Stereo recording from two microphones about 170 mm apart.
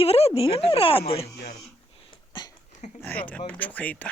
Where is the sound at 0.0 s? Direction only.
35° left (ahead or behind).